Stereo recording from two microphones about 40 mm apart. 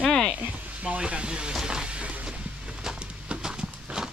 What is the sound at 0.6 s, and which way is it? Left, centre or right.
Speech, right.